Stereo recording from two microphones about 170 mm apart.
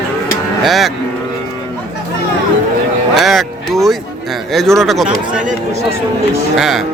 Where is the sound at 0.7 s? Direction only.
Centre (ahead or behind).